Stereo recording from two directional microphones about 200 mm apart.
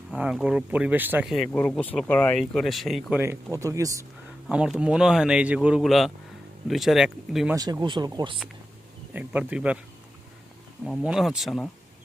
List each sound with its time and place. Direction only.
0.2 s speech: 5° right (ahead or behind)
4.4 s speech: 5° right (ahead or behind)
7.5 s speech: 20° right (ahead or behind)
9.1 s speech: 5° right (ahead or behind)
10.8 s speech: centre (ahead or behind)